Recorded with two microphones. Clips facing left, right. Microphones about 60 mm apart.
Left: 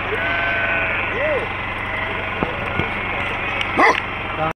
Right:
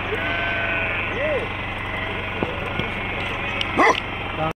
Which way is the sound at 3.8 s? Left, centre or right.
Left.